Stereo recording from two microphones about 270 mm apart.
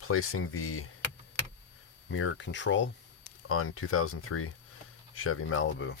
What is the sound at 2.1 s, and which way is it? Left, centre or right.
Speech, left.